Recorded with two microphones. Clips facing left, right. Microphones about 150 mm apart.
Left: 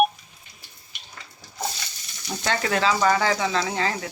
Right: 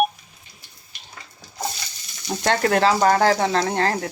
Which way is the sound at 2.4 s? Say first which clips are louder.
Right 5 dB; 55° right (ahead or behind).